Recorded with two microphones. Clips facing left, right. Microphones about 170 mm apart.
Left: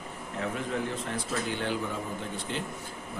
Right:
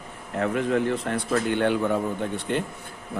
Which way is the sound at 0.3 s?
65° right (ahead or behind).